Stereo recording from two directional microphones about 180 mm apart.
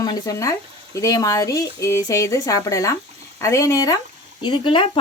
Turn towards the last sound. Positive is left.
turn(degrees=30)  # may be behind; listen again after turning